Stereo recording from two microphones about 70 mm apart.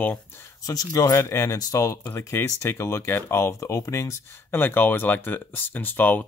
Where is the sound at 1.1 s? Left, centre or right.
Left.